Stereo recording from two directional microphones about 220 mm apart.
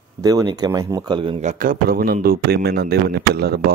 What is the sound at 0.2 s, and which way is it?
A man's voice, 15° right (ahead or behind).